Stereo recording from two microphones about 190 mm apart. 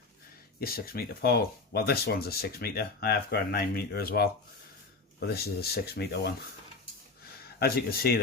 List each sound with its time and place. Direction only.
0.6 s speech: 50° left (ahead or behind)
7.6 s speech: 55° left (ahead or behind)